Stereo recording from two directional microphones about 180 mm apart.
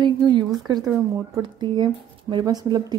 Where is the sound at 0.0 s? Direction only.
25° right (ahead or behind).